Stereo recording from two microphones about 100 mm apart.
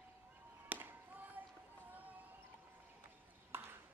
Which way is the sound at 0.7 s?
20° right (ahead or behind).